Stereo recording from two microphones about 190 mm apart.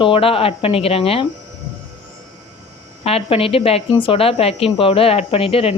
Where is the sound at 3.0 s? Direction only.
30° left (ahead or behind).